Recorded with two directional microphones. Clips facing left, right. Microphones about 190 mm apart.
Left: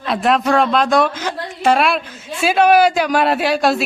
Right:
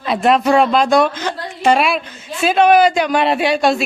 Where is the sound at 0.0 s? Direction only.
Centre (ahead or behind).